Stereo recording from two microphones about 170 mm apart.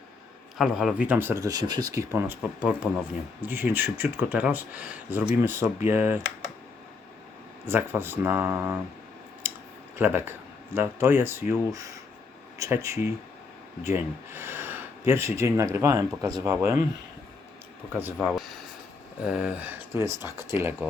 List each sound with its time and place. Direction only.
0.6 s speech: centre (ahead or behind)
7.6 s speech: 15° right (ahead or behind)
9.4 s a sound: 10° right (ahead or behind)
10.0 s speech: 10° right (ahead or behind)
17.9 s speech: 10° right (ahead or behind)